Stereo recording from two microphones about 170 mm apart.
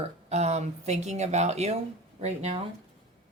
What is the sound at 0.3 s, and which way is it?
Speech, 40° right (ahead or behind).